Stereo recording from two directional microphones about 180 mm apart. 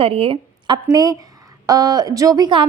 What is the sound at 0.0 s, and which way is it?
A woman's voice, 30° right (ahead or behind).